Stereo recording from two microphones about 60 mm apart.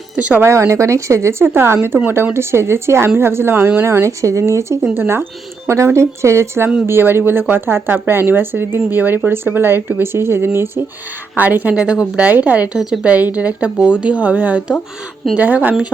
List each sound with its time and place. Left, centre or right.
0.3 s speech: right
4.9 s speech: right
11.3 s speech: right
12.7 s a woman's voice: centre
13.1 s speech: right